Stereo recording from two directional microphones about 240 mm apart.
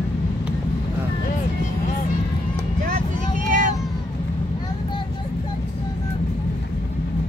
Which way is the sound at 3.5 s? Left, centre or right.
Right.